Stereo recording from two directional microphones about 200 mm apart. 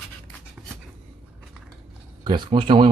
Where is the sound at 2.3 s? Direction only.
25° right (ahead or behind).